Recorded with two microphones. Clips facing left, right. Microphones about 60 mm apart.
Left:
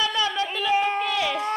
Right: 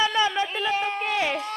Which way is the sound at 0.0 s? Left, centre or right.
Right.